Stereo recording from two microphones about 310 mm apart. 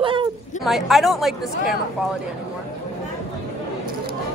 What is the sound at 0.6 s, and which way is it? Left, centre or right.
A woman's voice, centre.